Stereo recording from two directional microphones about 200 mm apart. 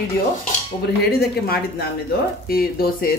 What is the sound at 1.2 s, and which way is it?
Speech, 50° left (ahead or behind).